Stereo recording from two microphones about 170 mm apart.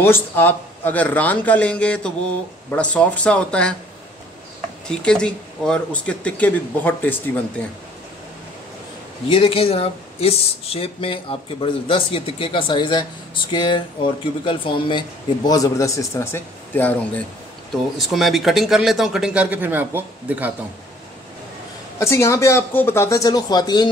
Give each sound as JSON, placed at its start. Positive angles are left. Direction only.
{"t": 0.0, "sound": "speech", "side_deg": 10}
{"t": 4.8, "sound": "speech", "side_deg": 5}
{"t": 9.3, "sound": "speech", "side_deg": 35}
{"t": 17.9, "sound": "speech", "side_deg": 0}
{"t": 21.9, "sound": "speech", "side_deg": 15}